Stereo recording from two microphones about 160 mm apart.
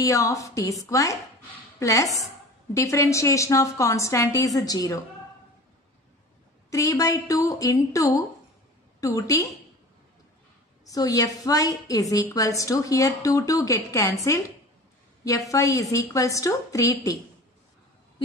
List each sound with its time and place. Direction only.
0.0 s a woman's voice: 20° left (ahead or behind)
6.7 s a woman's voice: 20° left (ahead or behind)
10.9 s a woman's voice: 20° left (ahead or behind)